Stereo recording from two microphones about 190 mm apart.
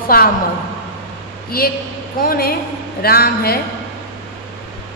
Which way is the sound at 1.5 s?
50° left (ahead or behind).